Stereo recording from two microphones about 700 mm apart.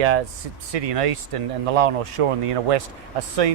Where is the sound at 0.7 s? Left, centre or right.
Right.